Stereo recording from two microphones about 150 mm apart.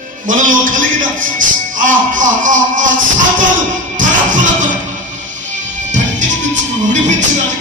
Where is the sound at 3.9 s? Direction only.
60° right (ahead or behind).